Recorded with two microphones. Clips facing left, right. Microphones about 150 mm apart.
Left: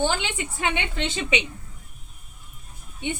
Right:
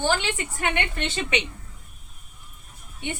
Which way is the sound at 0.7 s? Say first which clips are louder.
Even; 15° left (ahead or behind).